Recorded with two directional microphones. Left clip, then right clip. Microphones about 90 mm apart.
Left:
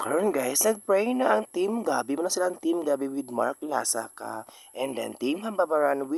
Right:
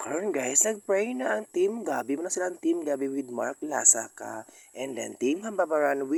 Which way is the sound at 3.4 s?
30° left (ahead or behind).